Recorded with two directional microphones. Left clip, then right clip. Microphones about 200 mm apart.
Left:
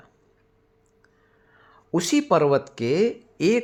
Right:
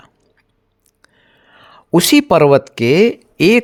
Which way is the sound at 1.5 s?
45° right (ahead or behind).